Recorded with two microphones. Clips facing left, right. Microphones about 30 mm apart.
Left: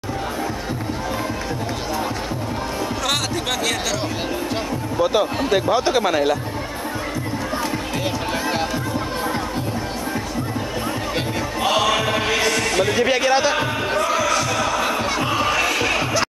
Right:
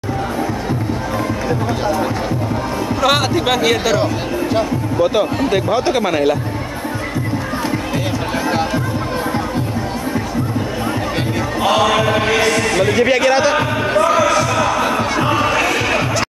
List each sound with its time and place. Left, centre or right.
3.0 s speech: centre
11.6 s music: centre
11.9 s music: right
12.2 s speech: centre
13.8 s music: centre
14.9 s music: centre